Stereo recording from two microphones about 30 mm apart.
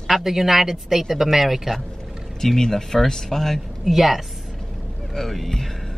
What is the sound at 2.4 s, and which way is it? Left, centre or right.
Speech, centre.